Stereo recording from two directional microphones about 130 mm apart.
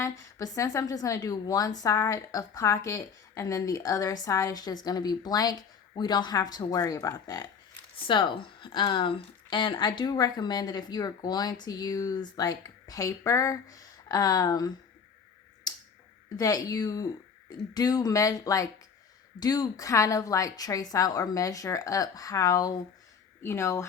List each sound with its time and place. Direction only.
0.0 s a woman's voice: 25° left (ahead or behind)
7.9 s speech: 40° left (ahead or behind)
15.7 s finger snapping: 30° left (ahead or behind)
16.4 s a woman's voice: 30° left (ahead or behind)